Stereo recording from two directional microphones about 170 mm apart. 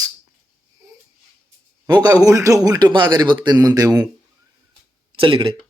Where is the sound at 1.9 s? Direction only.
25° right (ahead or behind).